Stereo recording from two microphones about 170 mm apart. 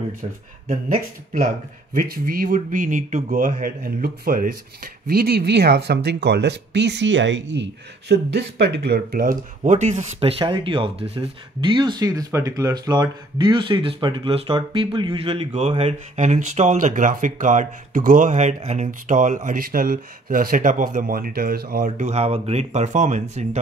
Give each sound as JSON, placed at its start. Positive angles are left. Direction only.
{"t": 0.7, "sound": "a man's voice", "side_deg": -55}
{"t": 9.6, "sound": "speech", "side_deg": -45}
{"t": 10.4, "sound": "speech", "side_deg": -30}